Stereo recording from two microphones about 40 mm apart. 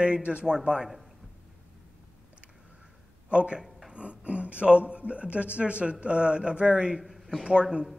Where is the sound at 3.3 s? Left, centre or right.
Right.